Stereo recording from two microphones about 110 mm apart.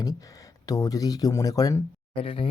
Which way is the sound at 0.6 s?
35° left (ahead or behind).